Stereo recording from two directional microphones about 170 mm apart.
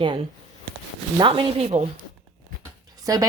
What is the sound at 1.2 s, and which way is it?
Speech, 30° right (ahead or behind).